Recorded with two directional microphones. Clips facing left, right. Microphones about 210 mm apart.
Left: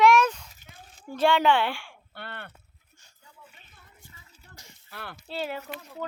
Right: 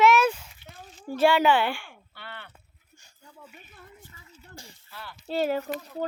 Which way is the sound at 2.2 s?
55° left (ahead or behind).